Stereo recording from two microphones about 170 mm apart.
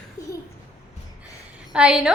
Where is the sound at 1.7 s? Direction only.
5° right (ahead or behind).